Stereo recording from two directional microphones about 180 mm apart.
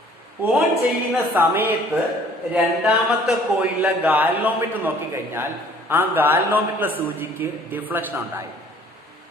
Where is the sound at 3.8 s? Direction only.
10° right (ahead or behind).